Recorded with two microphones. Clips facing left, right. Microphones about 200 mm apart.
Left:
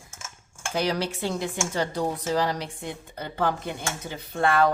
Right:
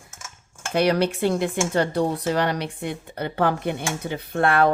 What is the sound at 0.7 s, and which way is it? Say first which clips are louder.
Speech: right 6 dB; 65° right (ahead or behind).